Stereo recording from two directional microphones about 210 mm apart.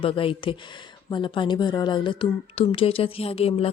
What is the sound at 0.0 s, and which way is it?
A woman's voice, 25° left (ahead or behind).